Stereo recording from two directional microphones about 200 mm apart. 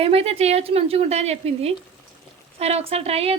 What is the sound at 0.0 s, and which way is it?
A woman's voice, 30° right (ahead or behind).